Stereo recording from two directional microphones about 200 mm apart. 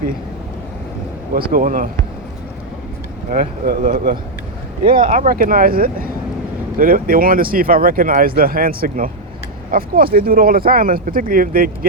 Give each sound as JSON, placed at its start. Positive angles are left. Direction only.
{"t": 1.3, "sound": "speech", "side_deg": -50}
{"t": 3.2, "sound": "speech", "side_deg": -45}